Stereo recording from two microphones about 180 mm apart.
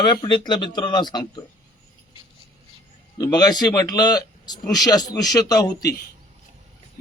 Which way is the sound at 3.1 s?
20° left (ahead or behind).